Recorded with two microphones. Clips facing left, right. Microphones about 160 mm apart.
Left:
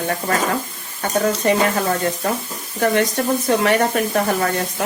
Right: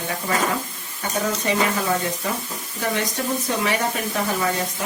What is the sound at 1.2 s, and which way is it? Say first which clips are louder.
Speech: left 5 dB; 55° left (ahead or behind).